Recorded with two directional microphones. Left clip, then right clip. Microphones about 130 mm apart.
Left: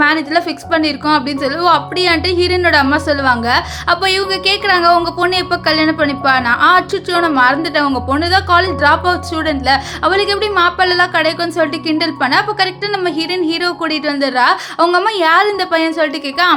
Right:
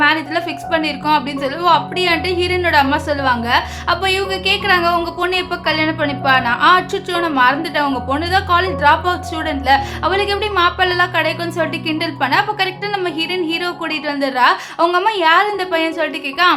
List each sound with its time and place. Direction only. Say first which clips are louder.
0.0 s a woman's voice: left 2 dB; 30° left (ahead or behind)